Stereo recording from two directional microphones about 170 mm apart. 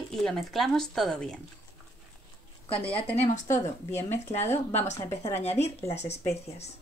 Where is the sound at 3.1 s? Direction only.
45° left (ahead or behind).